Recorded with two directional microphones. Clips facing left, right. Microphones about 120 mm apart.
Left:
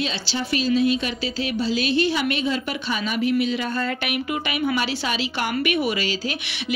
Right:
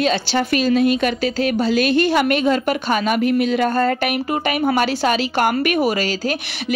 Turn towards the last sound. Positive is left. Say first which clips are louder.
# right 6 dB
turn(degrees=-45)  # may be behind; listen again after turning